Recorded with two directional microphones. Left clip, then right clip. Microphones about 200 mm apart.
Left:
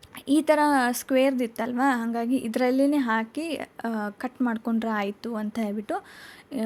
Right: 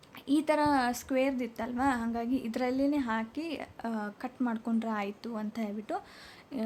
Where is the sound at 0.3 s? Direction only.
25° left (ahead or behind).